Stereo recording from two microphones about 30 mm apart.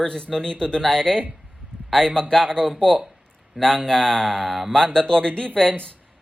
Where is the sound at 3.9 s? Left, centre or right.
Left.